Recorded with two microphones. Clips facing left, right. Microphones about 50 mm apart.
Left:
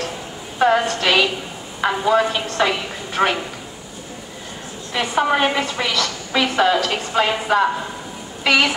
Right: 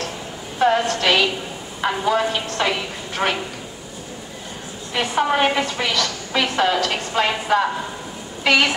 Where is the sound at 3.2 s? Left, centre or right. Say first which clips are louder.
Left 3 dB; left.